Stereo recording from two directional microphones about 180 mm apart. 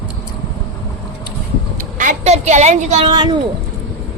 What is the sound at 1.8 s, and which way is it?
A woman's voice, 45° right (ahead or behind).